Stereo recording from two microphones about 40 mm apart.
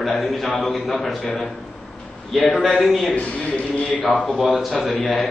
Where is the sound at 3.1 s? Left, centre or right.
Left.